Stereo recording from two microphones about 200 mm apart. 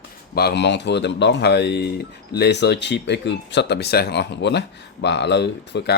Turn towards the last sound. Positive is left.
turn(degrees=60)  # may be behind; listen again after turning